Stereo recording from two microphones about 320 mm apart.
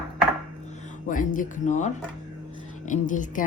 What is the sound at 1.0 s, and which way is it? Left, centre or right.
Speech, left.